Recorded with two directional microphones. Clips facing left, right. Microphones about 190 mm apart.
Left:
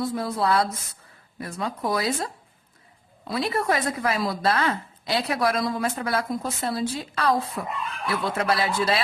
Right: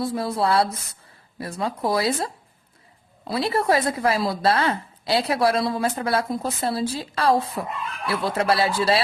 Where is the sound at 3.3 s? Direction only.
30° right (ahead or behind).